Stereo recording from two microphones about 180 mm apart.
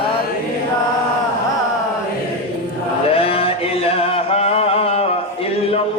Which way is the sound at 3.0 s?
30° left (ahead or behind).